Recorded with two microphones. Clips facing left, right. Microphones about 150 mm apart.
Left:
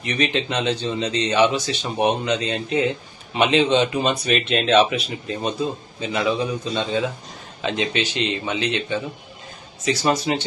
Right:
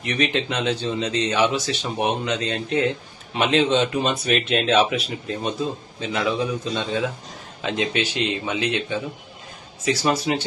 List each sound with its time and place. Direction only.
0.0 s speech: centre (ahead or behind)